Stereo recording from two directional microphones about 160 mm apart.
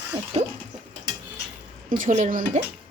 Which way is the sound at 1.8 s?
55° right (ahead or behind).